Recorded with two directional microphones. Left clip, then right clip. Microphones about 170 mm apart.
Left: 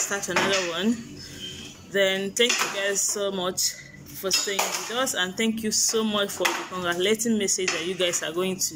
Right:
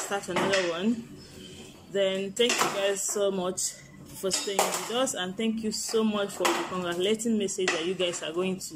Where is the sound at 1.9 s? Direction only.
5° right (ahead or behind).